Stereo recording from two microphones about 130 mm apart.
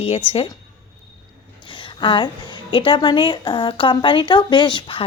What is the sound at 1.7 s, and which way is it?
A woman's voice, 40° left (ahead or behind).